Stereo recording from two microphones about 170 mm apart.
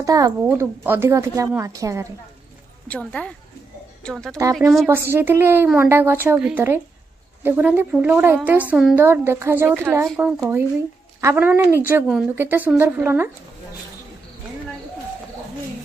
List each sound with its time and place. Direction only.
0.0 s a woman's voice: 20° right (ahead or behind)
2.9 s speech: 10° left (ahead or behind)
4.8 s a woman's voice: 15° right (ahead or behind)